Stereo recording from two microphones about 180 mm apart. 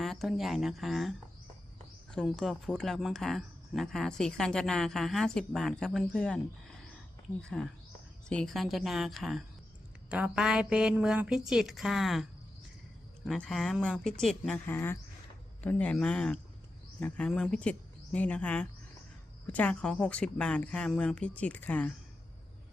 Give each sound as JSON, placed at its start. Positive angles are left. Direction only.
{"t": 0.0, "sound": "speech", "side_deg": 0}
{"t": 2.1, "sound": "speech", "side_deg": 0}
{"t": 8.3, "sound": "speech", "side_deg": 5}